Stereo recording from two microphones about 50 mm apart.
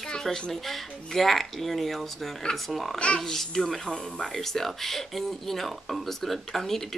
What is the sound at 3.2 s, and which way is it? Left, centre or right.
Speech, centre.